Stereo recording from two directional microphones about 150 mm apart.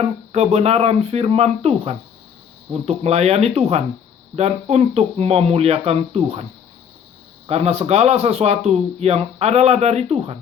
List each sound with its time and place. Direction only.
0.3 s speech: 45° right (ahead or behind)
7.4 s speech: 45° right (ahead or behind)